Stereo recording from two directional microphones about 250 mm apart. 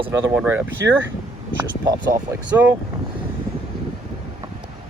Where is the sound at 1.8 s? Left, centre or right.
Centre.